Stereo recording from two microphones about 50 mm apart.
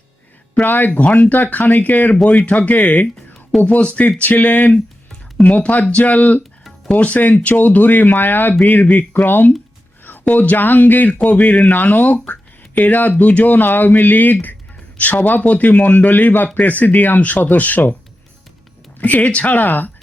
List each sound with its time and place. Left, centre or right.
0.6 s speech: left
2.1 s speech: centre
2.5 s speech: left
4.2 s speech: left
18.9 s speech: left